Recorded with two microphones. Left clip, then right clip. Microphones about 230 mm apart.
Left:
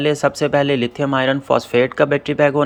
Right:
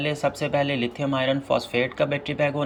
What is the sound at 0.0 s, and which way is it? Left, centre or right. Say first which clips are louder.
Speech: left 8 dB; centre.